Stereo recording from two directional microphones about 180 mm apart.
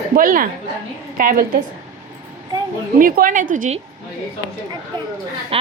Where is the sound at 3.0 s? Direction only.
50° right (ahead or behind).